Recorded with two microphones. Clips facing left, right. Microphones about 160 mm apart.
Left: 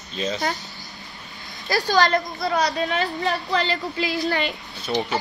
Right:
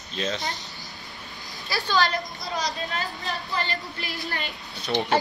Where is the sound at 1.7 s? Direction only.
40° left (ahead or behind).